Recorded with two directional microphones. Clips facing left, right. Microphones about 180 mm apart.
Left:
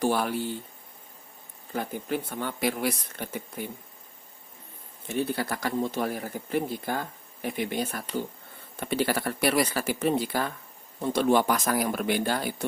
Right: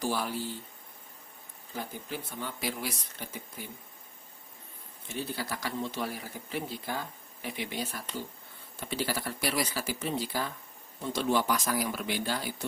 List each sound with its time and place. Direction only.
0.0 s speech: 60° left (ahead or behind)
1.7 s speech: 60° left (ahead or behind)
5.0 s speech: 60° left (ahead or behind)